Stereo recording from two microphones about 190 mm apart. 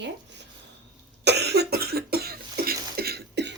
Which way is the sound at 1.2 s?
60° right (ahead or behind).